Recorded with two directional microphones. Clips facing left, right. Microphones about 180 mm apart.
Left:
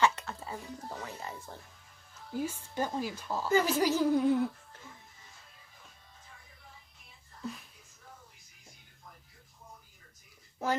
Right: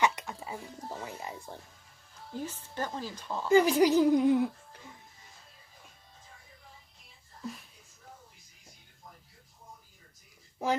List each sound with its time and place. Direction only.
0.0 s music: 15° right (ahead or behind)
2.3 s a woman's voice: 10° left (ahead or behind)
3.5 s speech: 15° right (ahead or behind)
10.6 s speech: 15° right (ahead or behind)